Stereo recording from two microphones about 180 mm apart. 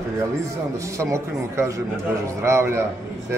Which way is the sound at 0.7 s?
15° right (ahead or behind).